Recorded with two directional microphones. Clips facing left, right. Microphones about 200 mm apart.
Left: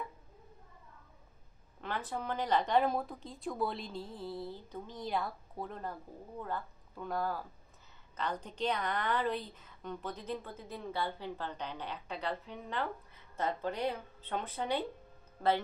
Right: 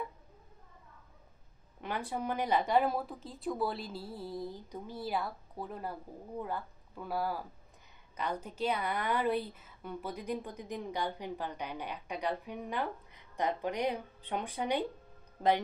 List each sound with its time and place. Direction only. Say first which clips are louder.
1.8 s a woman's voice: right 2 dB; 10° right (ahead or behind)